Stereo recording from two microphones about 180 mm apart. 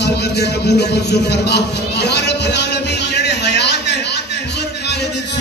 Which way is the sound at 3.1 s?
70° left (ahead or behind).